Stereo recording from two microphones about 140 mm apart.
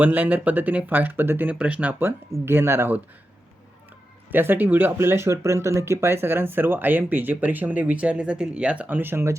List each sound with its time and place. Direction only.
0.0 s speech: 10° right (ahead or behind)
4.3 s speech: 15° right (ahead or behind)